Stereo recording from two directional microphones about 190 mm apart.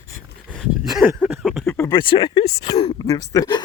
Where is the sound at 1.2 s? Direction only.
Centre (ahead or behind).